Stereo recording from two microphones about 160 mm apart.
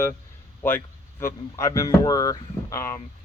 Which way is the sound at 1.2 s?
15° left (ahead or behind).